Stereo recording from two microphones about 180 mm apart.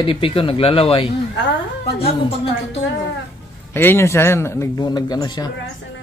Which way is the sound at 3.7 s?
15° left (ahead or behind).